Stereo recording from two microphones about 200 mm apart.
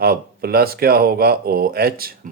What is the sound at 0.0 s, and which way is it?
Speech, 50° right (ahead or behind).